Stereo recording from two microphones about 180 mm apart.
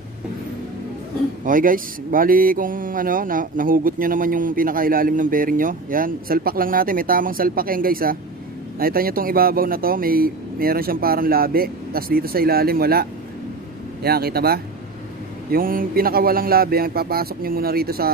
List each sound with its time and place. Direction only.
1.4 s speech: 50° right (ahead or behind)